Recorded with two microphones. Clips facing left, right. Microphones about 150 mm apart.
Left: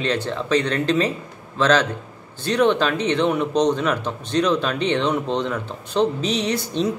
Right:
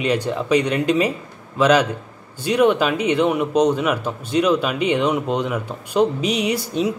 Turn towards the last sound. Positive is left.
turn(degrees=-10)  # may be behind; listen again after turning